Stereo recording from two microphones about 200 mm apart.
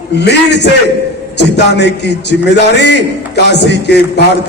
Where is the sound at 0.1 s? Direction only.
55° left (ahead or behind).